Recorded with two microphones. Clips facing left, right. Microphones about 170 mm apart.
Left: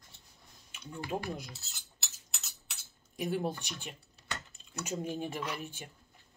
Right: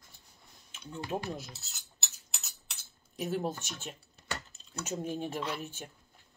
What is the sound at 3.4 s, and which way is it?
Speech, 45° right (ahead or behind).